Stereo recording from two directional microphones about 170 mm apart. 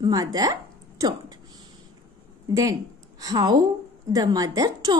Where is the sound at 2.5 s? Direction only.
20° right (ahead or behind).